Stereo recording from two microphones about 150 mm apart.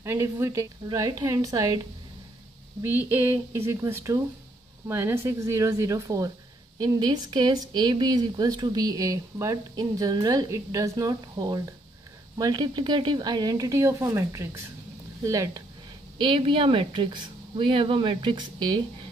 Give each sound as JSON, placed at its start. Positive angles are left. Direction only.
{"t": 0.0, "sound": "speech", "side_deg": -20}
{"t": 2.8, "sound": "speech", "side_deg": -15}
{"t": 16.2, "sound": "speech", "side_deg": -35}